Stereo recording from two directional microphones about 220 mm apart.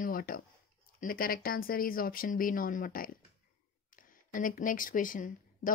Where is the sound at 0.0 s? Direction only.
40° left (ahead or behind).